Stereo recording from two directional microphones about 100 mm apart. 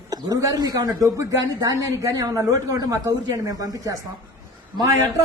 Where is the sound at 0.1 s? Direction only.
35° right (ahead or behind).